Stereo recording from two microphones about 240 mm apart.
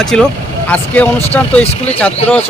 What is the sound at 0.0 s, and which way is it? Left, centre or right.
Speech, centre.